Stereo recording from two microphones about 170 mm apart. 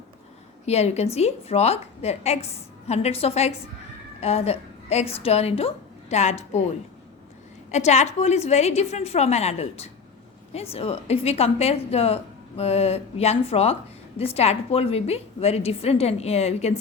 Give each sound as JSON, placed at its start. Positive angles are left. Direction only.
{"t": 0.6, "sound": "a woman's voice", "side_deg": 40}
{"t": 7.7, "sound": "a woman's voice", "side_deg": 40}